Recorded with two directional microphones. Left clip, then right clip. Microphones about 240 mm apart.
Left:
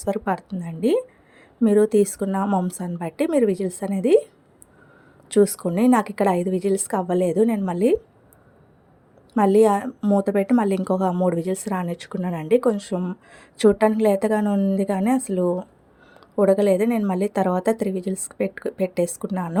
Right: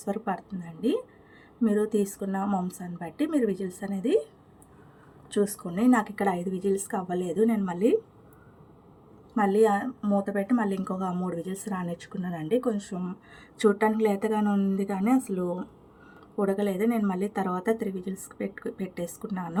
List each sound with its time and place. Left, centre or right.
0.0 s a woman's voice: left
5.3 s a woman's voice: left
9.3 s a woman's voice: left